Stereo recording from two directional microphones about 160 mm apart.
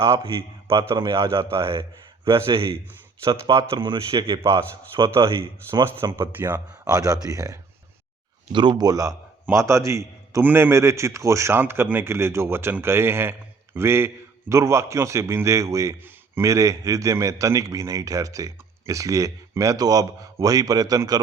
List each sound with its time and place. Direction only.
0.3 s a man's voice: 35° right (ahead or behind)
1.1 s a man's voice: 20° right (ahead or behind)
2.5 s a man's voice: 35° right (ahead or behind)
3.2 s a man's voice: 20° right (ahead or behind)
4.4 s a man's voice: 20° right (ahead or behind)